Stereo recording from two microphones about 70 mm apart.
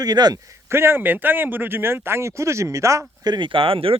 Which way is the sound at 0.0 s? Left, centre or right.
Right.